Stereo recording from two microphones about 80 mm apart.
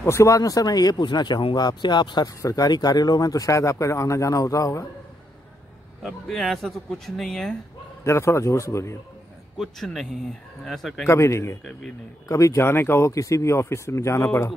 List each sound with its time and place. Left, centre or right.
0.0 s speech: left
1.0 s speech: left
2.2 s speech: left
6.0 s speech: centre
8.0 s speech: left
9.6 s speech: centre
11.1 s speech: left
13.1 s speech: left